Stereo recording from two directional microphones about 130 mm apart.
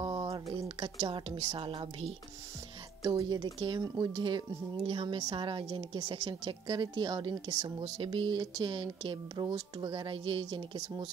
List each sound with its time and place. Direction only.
0.0 s a sound: 35° right (ahead or behind)
0.5 s a woman's voice: 45° right (ahead or behind)
3.0 s speech: 30° right (ahead or behind)